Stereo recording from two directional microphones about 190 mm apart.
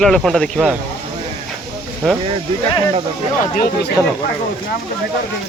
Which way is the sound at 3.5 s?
50° left (ahead or behind).